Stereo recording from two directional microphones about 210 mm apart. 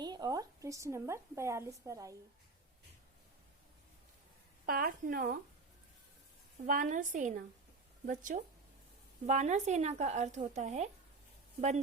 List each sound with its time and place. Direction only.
0.0 s a woman's voice: 20° right (ahead or behind)
4.6 s speech: 45° right (ahead or behind)
6.7 s speech: 40° right (ahead or behind)